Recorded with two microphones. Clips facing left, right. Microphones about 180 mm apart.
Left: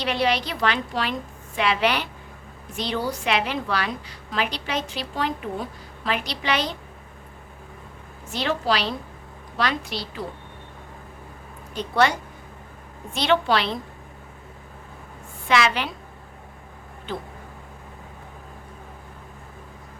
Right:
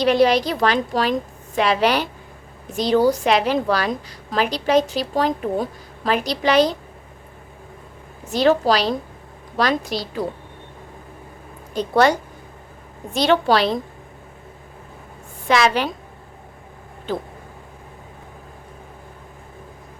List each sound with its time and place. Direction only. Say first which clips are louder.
0.0 s a woman's voice: right 8 dB; 40° right (ahead or behind)
8.3 s a woman's voice: right 8 dB; 40° right (ahead or behind)
11.7 s a woman's voice: right 5 dB; 40° right (ahead or behind)
13.1 s a woman's voice: right 4 dB; 40° right (ahead or behind)
15.4 s a woman's voice: right 4 dB; 40° right (ahead or behind)
17.1 s a woman's voice: right 6 dB; 40° right (ahead or behind)